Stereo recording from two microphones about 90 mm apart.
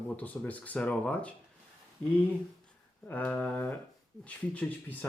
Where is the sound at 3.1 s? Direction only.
20° left (ahead or behind).